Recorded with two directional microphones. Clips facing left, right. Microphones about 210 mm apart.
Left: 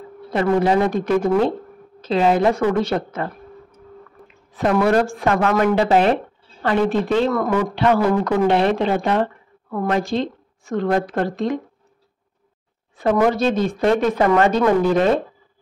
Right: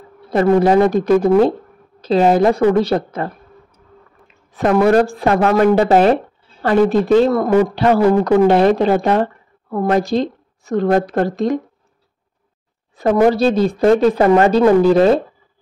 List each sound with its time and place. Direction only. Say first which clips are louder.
0.3 s speech: right 5 dB; 40° right (ahead or behind)
4.6 s speech: right 4 dB; 45° right (ahead or behind)
12.9 s speech: right 4 dB; 35° right (ahead or behind)